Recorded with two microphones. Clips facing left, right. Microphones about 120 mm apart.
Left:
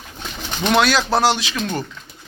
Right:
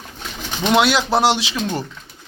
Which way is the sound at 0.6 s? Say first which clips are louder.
Right 1 dB; 20° right (ahead or behind).